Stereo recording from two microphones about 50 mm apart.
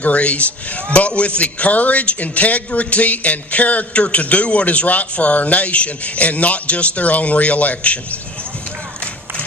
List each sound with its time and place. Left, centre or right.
0.0 s a man's voice: left